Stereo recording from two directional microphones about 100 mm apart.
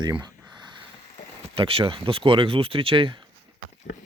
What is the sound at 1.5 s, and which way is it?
Speech, 65° right (ahead or behind).